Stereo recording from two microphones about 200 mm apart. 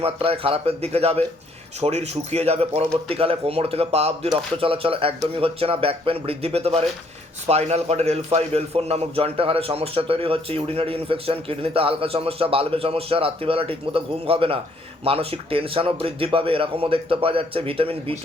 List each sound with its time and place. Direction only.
0.0 s a man's voice: 30° right (ahead or behind)